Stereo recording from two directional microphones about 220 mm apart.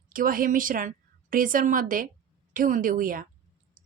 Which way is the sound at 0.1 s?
40° right (ahead or behind).